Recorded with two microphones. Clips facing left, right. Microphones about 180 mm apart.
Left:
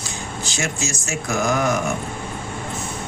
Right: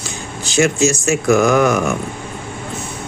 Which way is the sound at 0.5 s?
60° right (ahead or behind).